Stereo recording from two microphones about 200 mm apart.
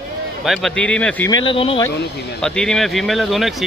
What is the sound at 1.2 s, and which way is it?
Speech, 25° left (ahead or behind).